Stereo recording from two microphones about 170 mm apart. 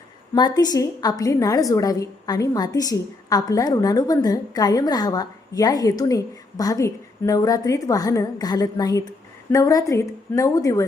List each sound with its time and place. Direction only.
0.3 s a woman's voice: 25° left (ahead or behind)